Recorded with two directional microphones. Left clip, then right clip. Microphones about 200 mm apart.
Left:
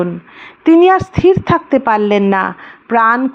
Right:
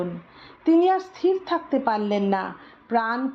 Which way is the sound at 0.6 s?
35° left (ahead or behind).